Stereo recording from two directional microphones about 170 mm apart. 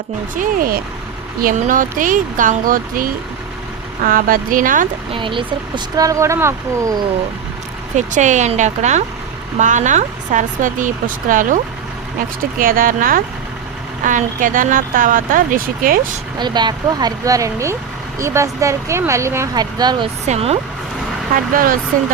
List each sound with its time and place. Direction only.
0.3 s speech: 55° right (ahead or behind)
5.1 s speech: 30° right (ahead or behind)
7.9 s speech: 45° right (ahead or behind)
16.4 s speech: 25° right (ahead or behind)
20.2 s speech: 40° right (ahead or behind)
21.5 s speech: 55° right (ahead or behind)